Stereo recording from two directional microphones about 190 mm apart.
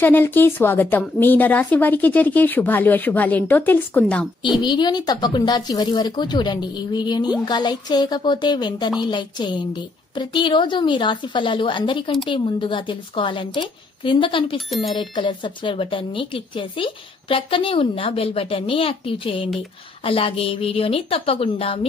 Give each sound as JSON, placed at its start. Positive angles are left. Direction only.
{"t": 0.0, "sound": "a woman's voice", "side_deg": 10}
{"t": 4.6, "sound": "speech", "side_deg": 25}